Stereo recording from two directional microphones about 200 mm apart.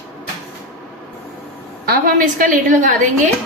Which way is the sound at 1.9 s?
45° right (ahead or behind).